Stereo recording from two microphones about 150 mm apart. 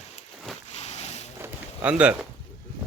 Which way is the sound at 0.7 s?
50° left (ahead or behind).